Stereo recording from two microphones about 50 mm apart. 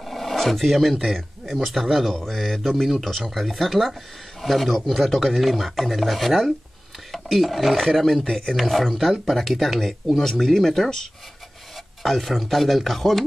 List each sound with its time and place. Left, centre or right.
0.0 s speech: centre